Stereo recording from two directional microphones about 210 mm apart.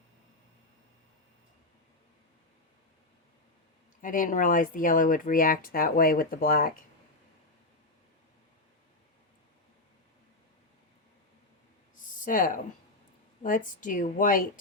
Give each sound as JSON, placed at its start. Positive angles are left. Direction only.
{"t": 4.0, "sound": "speech", "side_deg": 40}
{"t": 12.2, "sound": "speech", "side_deg": 40}
{"t": 13.8, "sound": "speech", "side_deg": 40}